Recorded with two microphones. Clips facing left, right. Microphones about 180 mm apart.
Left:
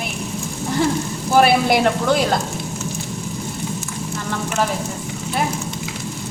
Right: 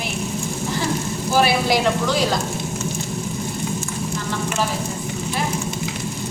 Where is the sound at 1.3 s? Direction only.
55° left (ahead or behind).